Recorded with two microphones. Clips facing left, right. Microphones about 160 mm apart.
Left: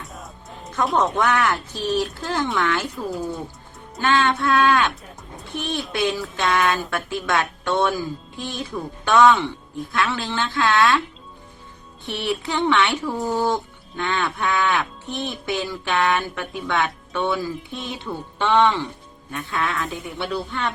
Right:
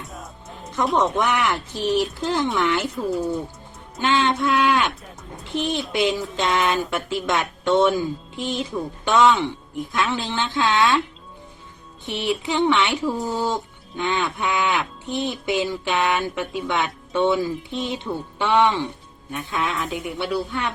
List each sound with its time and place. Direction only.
0.0 s music: centre (ahead or behind)
0.9 s speech: 15° right (ahead or behind)
2.9 s speech: centre (ahead or behind)
4.0 s speech: 20° right (ahead or behind)
12.0 s speech: 15° right (ahead or behind)
13.2 s speech: 15° left (ahead or behind)
13.5 s speech: 15° right (ahead or behind)